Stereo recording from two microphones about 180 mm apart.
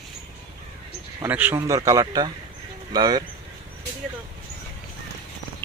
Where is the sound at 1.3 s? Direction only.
10° right (ahead or behind).